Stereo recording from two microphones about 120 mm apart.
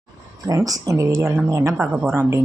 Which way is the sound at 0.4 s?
30° right (ahead or behind).